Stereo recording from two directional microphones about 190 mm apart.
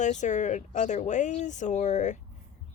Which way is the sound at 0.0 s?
40° left (ahead or behind).